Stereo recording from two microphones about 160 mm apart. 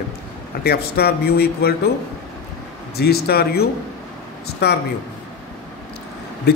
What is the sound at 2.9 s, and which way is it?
Speech, 80° left.